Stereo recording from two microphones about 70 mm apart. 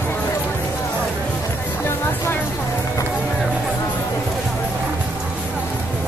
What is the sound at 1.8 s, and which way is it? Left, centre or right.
Music, left.